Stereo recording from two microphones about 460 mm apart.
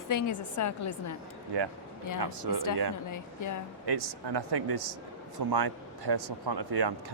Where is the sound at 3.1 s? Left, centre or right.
Left.